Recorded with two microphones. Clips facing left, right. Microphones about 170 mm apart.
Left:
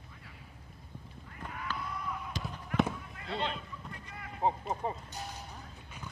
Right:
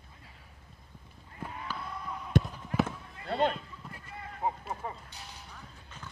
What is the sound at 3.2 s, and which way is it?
Horse, 50° right (ahead or behind).